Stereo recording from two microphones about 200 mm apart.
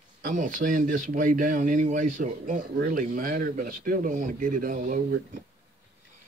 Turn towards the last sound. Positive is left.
turn(degrees=-45)  # may be behind; listen again after turning